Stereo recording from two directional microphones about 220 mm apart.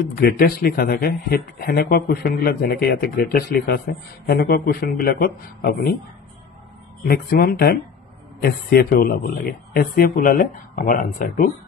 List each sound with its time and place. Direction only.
0.1 s speech: 45° left (ahead or behind)
7.0 s speech: 45° left (ahead or behind)